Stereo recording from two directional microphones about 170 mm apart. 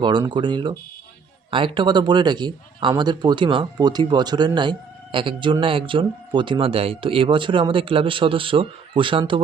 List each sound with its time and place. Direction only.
0.0 s speech: 25° right (ahead or behind)